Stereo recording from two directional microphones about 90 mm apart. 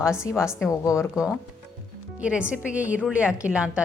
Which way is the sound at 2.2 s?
10° right (ahead or behind).